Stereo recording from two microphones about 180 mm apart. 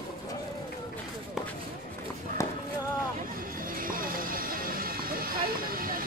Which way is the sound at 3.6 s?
50° right (ahead or behind).